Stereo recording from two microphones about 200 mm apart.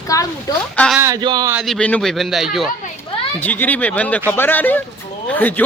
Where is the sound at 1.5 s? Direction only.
Centre (ahead or behind).